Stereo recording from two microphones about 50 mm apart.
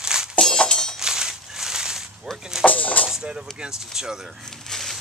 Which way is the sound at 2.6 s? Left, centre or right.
Left.